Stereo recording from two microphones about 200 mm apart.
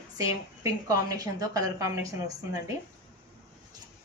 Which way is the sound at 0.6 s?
15° right (ahead or behind).